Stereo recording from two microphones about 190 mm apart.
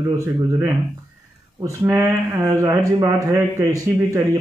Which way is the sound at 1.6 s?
15° right (ahead or behind).